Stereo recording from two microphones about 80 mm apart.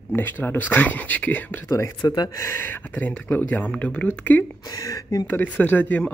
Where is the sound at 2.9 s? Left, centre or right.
Centre.